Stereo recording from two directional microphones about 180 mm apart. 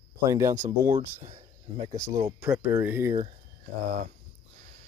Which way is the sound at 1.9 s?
15° right (ahead or behind).